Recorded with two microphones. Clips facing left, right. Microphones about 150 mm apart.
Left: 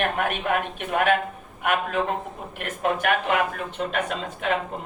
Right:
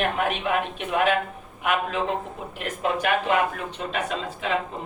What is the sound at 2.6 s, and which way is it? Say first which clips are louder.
Speech: left 1 dB; 50° left (ahead or behind).